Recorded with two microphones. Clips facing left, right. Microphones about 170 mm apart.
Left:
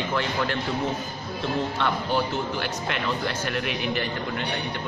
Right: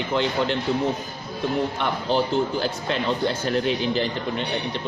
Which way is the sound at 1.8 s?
25° right (ahead or behind).